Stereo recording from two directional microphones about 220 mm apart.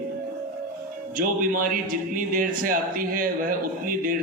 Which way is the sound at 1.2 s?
40° right (ahead or behind).